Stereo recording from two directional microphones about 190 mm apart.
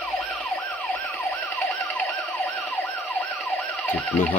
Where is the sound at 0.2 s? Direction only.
Centre (ahead or behind).